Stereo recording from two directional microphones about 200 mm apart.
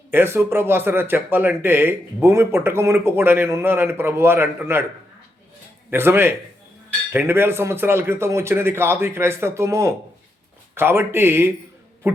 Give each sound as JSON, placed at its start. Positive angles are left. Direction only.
{"t": 0.1, "sound": "speech", "side_deg": -10}
{"t": 5.9, "sound": "speech", "side_deg": -10}